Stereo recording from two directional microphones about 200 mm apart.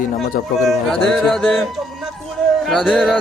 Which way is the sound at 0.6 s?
Centre (ahead or behind).